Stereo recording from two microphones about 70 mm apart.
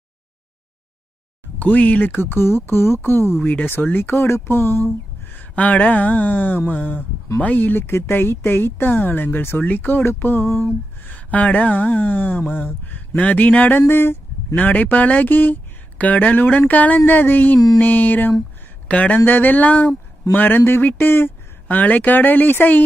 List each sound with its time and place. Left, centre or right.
1.5 s speech: left
2.3 s speech: left
3.4 s speech: centre
4.0 s speech: left
11.0 s a man's voice: left